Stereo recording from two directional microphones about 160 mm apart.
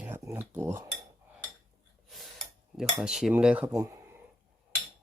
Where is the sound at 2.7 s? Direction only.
5° right (ahead or behind).